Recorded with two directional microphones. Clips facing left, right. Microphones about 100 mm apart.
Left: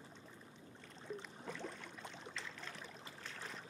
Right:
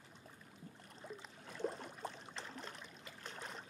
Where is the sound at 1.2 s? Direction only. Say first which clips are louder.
Right 4 dB; 35° right (ahead or behind).